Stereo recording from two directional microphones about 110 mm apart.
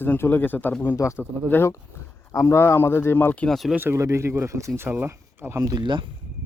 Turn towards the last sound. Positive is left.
turn(degrees=-45)  # may be behind; listen again after turning